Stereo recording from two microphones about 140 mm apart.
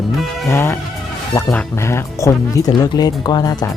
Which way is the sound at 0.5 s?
20° left (ahead or behind).